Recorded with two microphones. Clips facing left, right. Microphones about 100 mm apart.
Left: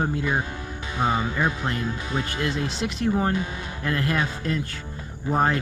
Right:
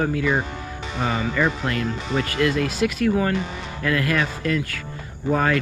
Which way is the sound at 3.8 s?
90° right.